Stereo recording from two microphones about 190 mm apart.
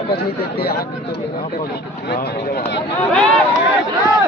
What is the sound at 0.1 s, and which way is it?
Speech, 55° left (ahead or behind).